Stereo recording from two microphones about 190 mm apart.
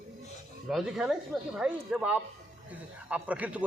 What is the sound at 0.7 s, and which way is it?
A man's voice, centre (ahead or behind).